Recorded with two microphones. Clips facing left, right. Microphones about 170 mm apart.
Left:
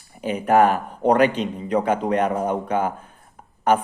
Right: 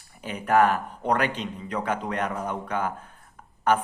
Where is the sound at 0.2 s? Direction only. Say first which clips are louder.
Left 4 dB; 20° left (ahead or behind).